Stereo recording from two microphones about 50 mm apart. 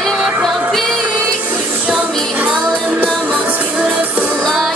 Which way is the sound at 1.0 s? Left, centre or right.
Right.